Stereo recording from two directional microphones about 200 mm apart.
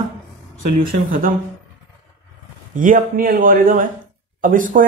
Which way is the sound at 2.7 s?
40° right (ahead or behind).